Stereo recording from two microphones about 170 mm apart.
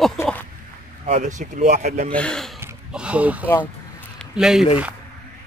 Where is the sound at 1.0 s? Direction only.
45° right (ahead or behind).